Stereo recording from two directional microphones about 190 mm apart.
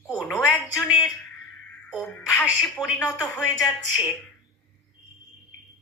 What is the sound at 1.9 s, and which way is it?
Speech, centre (ahead or behind).